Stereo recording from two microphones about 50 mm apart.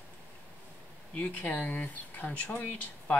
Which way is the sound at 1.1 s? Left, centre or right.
Left.